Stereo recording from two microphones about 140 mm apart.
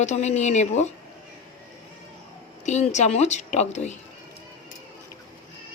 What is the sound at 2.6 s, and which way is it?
A woman's voice, 55° left (ahead or behind).